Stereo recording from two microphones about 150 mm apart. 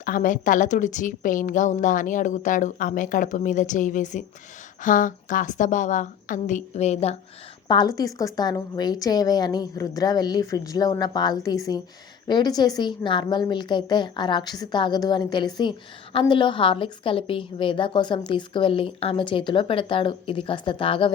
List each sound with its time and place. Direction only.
0.0 s a woman's voice: 65° left (ahead or behind); by 7.2 s 45° left (ahead or behind)
7.7 s a woman's voice: 30° left (ahead or behind)